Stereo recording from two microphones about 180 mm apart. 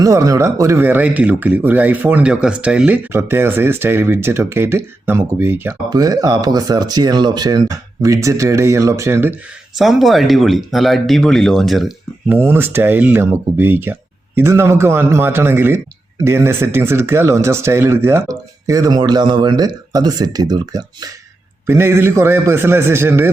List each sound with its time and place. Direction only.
0.0 s speech: 20° right (ahead or behind)
9.7 s speech: centre (ahead or behind)
12.4 s speech: 15° right (ahead or behind)